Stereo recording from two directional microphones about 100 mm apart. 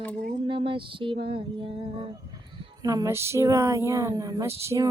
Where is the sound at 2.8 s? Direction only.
35° right (ahead or behind).